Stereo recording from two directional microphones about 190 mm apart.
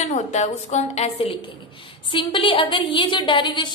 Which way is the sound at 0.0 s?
35° left (ahead or behind).